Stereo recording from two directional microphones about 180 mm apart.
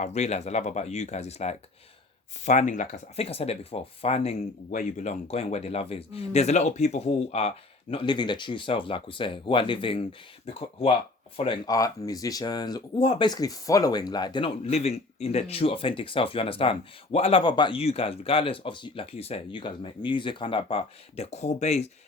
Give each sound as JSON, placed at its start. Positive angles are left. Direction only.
{"t": 0.0, "sound": "speech", "side_deg": 40}
{"t": 4.7, "sound": "speech", "side_deg": 45}